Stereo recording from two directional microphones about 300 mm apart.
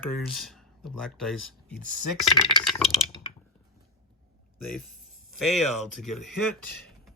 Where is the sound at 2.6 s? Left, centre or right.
Centre.